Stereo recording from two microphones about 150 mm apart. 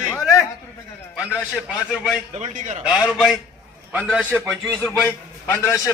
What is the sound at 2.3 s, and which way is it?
Speech, 55° right (ahead or behind).